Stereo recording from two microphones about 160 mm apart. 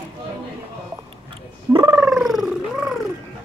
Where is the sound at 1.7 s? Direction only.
25° right (ahead or behind).